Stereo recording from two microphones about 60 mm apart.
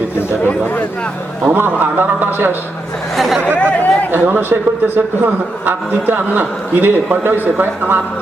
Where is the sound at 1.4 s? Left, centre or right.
Right.